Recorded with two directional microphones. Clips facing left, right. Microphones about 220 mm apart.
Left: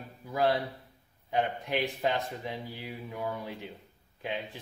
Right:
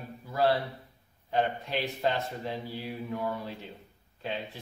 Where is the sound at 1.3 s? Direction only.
15° left (ahead or behind).